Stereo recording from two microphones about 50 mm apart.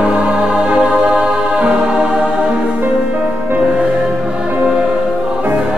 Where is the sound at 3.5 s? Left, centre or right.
Right.